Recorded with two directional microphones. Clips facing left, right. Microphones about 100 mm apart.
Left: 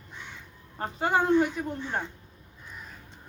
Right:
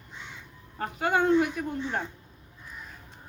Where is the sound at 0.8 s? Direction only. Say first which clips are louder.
Even; 30° left (ahead or behind).